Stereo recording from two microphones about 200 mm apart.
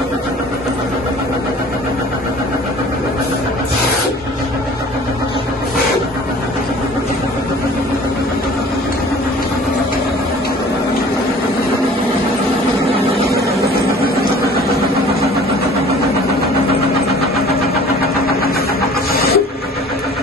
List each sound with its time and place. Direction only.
19.1 s printer: 50° left (ahead or behind)